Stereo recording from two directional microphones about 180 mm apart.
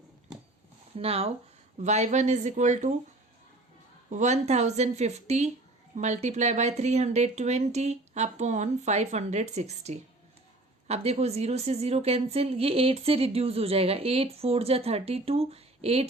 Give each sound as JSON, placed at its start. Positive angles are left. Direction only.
{"t": 0.9, "sound": "a woman's voice", "side_deg": -35}
{"t": 4.1, "sound": "a woman's voice", "side_deg": -40}